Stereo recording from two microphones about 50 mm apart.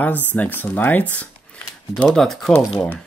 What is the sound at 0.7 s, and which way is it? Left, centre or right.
Mantra, left.